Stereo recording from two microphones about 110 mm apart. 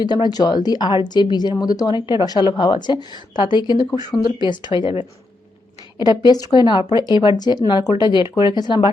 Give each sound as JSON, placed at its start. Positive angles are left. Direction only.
{"t": 0.0, "sound": "a woman's voice", "side_deg": 40}
{"t": 6.0, "sound": "a woman's voice", "side_deg": 40}